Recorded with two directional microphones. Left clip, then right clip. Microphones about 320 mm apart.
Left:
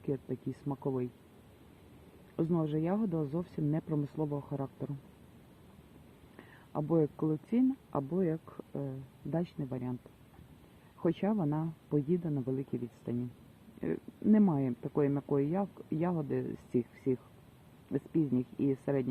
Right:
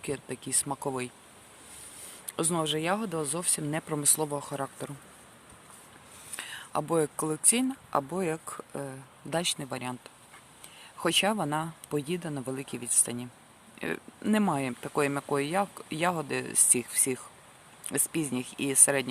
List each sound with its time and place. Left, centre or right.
0.0 s speech: right
2.3 s speech: right
6.3 s speech: right
11.0 s speech: right
13.8 s speech: right